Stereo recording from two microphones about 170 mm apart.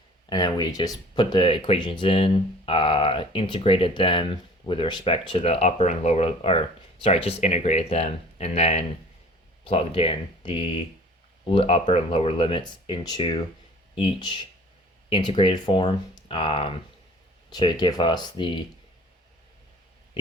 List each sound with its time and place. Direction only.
0.3 s speech: 25° left (ahead or behind)